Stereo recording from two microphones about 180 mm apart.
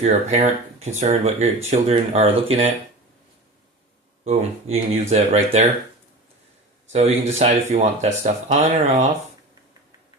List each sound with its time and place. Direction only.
0.0 s speech: 40° right (ahead or behind)
4.2 s speech: 35° right (ahead or behind)
6.9 s speech: 35° right (ahead or behind)